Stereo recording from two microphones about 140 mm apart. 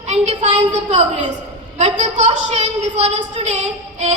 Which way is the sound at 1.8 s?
55° right (ahead or behind).